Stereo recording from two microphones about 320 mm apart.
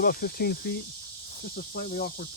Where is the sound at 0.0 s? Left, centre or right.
Left.